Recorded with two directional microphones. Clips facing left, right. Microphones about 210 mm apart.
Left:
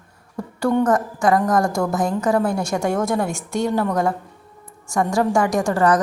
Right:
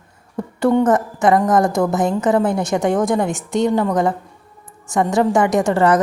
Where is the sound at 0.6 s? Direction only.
20° right (ahead or behind).